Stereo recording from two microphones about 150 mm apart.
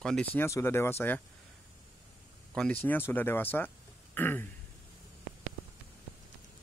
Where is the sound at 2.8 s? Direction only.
10° left (ahead or behind).